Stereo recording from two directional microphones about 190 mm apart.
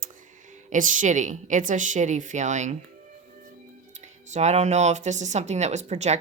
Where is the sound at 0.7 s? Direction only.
45° right (ahead or behind).